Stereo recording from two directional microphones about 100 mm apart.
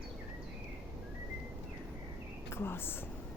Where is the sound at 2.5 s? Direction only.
25° left (ahead or behind).